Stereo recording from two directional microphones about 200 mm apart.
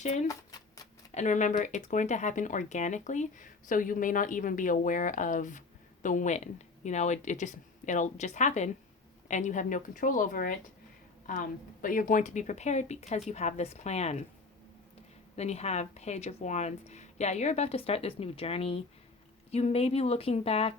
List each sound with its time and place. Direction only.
0.0 s speech: 35° left (ahead or behind)
15.4 s speech: 35° left (ahead or behind)